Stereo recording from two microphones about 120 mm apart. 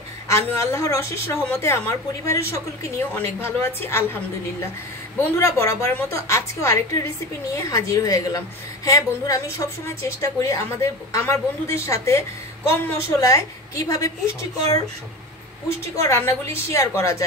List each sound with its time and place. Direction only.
0.3 s a woman's voice: 20° left (ahead or behind)
5.2 s a woman's voice: 25° left (ahead or behind)
16.0 s a woman's voice: 25° left (ahead or behind)